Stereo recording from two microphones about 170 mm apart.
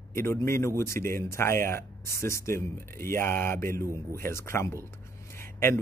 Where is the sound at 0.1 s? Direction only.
15° left (ahead or behind).